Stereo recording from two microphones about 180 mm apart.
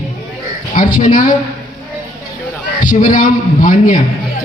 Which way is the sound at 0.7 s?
50° left (ahead or behind).